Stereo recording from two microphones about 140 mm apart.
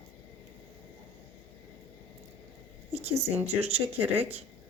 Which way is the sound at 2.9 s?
50° right (ahead or behind).